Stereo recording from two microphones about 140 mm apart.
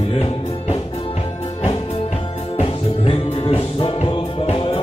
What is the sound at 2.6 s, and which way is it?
Music, 40° left (ahead or behind).